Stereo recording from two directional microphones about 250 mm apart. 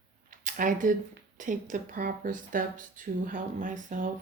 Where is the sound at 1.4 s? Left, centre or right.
Right.